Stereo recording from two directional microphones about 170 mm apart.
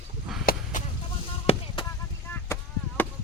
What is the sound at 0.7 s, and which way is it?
Vehicle, 50° left (ahead or behind).